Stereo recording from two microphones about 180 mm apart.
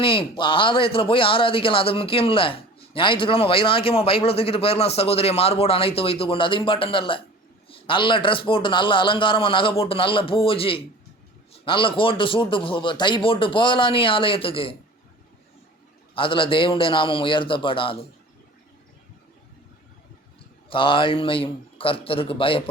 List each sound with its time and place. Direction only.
0.0 s a man's voice: 30° left (ahead or behind)
16.1 s a man's voice: 30° left (ahead or behind)
20.7 s a man's voice: 30° left (ahead or behind)